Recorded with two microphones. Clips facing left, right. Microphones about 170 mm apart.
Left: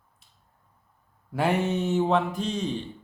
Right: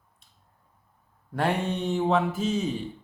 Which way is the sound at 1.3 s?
5° left (ahead or behind).